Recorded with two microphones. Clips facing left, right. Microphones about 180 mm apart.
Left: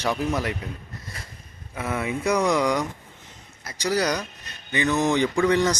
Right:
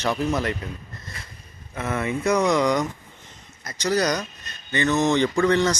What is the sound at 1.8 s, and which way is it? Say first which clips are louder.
Speech: right 1 dB; 10° left (ahead or behind).